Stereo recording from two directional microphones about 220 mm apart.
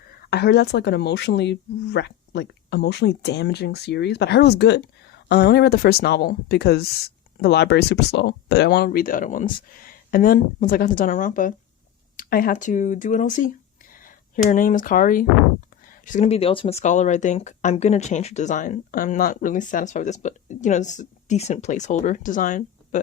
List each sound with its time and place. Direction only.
0.3 s speech: 50° left (ahead or behind)